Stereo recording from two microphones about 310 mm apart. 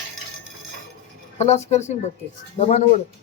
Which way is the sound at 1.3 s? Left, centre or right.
Left.